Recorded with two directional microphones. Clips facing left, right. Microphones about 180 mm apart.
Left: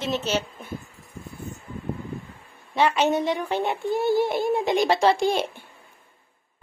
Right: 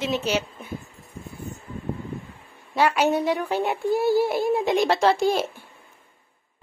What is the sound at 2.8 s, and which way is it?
A woman's voice, 10° right (ahead or behind).